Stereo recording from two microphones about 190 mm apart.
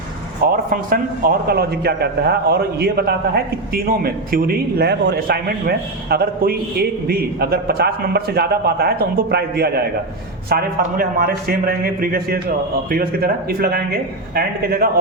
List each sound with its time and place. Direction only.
0.5 s a man's voice: 50° right (ahead or behind)